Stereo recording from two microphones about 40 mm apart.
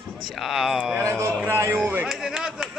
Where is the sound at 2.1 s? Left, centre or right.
Centre.